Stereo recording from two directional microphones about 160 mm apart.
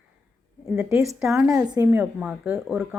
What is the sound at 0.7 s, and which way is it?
Speech, 15° right (ahead or behind).